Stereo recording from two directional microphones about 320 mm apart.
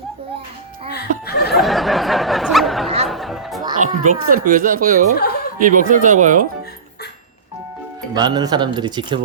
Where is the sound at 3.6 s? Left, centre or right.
Right.